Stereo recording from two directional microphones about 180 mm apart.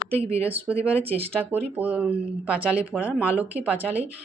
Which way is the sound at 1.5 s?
10° right (ahead or behind).